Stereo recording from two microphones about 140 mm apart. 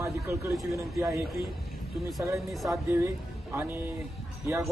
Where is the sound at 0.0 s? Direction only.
20° right (ahead or behind).